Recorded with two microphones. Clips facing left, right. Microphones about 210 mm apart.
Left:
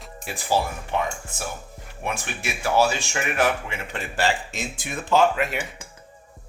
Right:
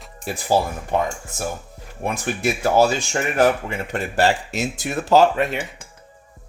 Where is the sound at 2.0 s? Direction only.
40° right (ahead or behind).